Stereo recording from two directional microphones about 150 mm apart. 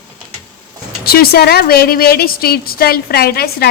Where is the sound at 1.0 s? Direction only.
90° left.